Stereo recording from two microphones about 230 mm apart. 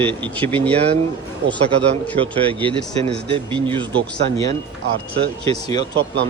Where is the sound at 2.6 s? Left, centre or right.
Right.